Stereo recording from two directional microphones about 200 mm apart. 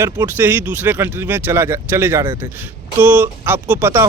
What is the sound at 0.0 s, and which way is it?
Speech, 10° right (ahead or behind).